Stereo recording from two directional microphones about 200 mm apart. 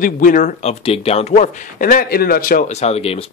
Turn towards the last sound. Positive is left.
turn(degrees=30)  # may be behind; listen again after turning